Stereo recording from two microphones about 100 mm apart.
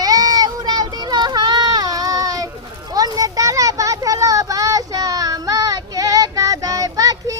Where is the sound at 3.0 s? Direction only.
40° right (ahead or behind).